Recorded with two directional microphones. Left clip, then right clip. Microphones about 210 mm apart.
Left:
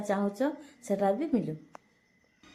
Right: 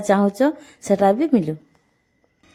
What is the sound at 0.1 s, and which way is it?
A woman's voice, 50° right (ahead or behind).